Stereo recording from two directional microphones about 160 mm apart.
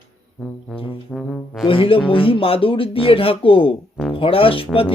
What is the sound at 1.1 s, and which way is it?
Speech, 5° left (ahead or behind).